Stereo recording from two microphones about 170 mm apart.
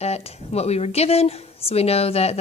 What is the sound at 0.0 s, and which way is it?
Speech, 40° left (ahead or behind).